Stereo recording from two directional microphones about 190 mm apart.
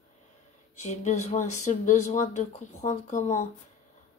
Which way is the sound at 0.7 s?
40° left (ahead or behind).